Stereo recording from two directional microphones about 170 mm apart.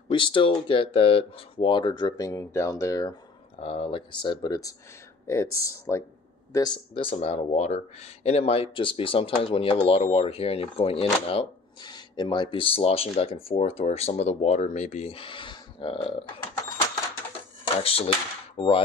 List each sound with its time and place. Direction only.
0.1 s speech: 30° left (ahead or behind)
3.5 s speech: 35° left (ahead or behind)
17.8 s speech: 35° left (ahead or behind)